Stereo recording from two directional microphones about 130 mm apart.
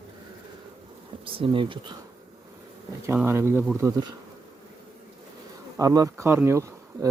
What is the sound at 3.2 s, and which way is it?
Speech, 20° right (ahead or behind).